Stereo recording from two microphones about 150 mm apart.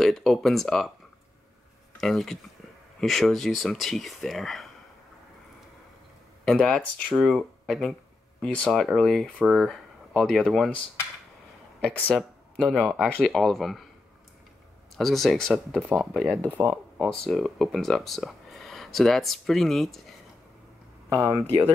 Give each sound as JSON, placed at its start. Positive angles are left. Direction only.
{"t": 0.0, "sound": "speech", "side_deg": 0}
{"t": 2.0, "sound": "speech", "side_deg": 0}
{"t": 6.4, "sound": "speech", "side_deg": 5}
{"t": 11.8, "sound": "speech", "side_deg": 5}
{"t": 15.0, "sound": "speech", "side_deg": 0}
{"t": 21.1, "sound": "speech", "side_deg": -20}